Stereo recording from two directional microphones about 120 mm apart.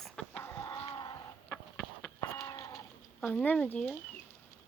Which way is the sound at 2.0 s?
25° left (ahead or behind).